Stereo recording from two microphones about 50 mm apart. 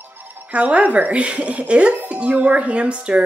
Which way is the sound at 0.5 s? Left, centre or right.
Right.